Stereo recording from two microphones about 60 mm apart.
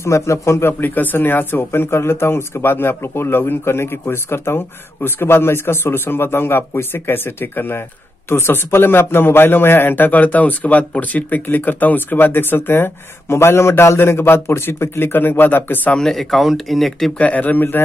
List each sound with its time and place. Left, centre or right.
0.0 s a man's voice: left
16.0 s speech: centre
17.2 s a man's voice: left